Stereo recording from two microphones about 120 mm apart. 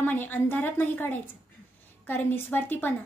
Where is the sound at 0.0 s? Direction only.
20° left (ahead or behind).